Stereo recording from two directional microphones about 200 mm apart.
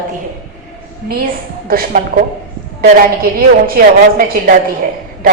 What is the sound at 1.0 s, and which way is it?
Speech, 50° right (ahead or behind).